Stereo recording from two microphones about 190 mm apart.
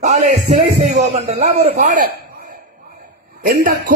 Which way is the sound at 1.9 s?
45° right (ahead or behind).